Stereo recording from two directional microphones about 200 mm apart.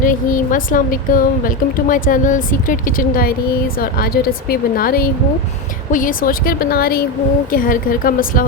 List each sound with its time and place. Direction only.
0.0 s a woman's voice: 40° left (ahead or behind)